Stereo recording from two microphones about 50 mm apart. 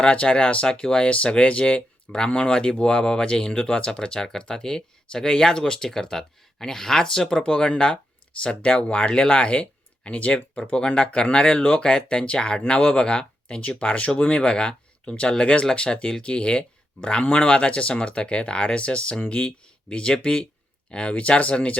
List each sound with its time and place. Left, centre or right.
0.0 s speech: left